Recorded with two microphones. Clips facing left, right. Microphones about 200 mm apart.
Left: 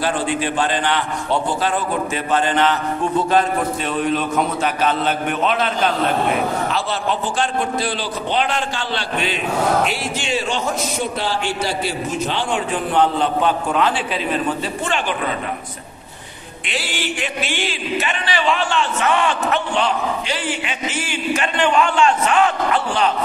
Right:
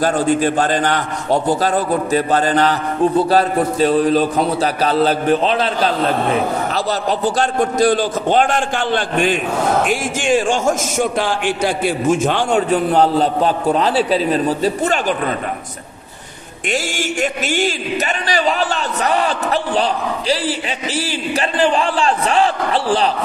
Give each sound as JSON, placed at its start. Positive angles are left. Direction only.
{"t": 0.0, "sound": "a man's voice", "side_deg": -40}
{"t": 16.6, "sound": "a man's voice", "side_deg": -45}